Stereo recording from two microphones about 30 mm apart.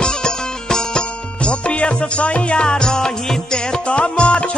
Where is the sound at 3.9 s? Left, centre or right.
Left.